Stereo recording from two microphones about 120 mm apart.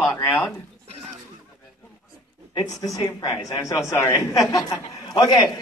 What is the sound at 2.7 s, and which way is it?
A man's voice, 30° left (ahead or behind).